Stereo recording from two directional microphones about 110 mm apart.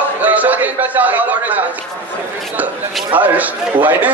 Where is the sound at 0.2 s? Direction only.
15° right (ahead or behind).